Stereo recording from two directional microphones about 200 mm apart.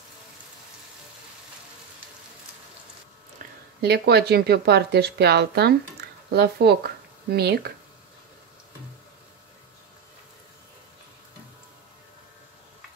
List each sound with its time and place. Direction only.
3.8 s speech: 55° right (ahead or behind)